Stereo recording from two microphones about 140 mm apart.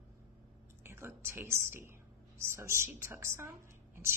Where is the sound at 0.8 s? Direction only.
15° right (ahead or behind).